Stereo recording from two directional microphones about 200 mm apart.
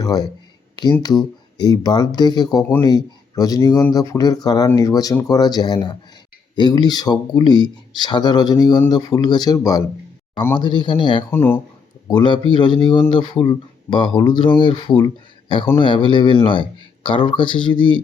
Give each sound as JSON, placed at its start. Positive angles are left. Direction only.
{"t": 0.0, "sound": "speech", "side_deg": 20}
{"t": 11.3, "sound": "speech", "side_deg": 10}
{"t": 12.0, "sound": "speech", "side_deg": 20}